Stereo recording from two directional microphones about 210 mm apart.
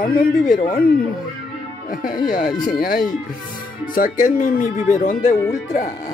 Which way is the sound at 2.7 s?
45° left (ahead or behind).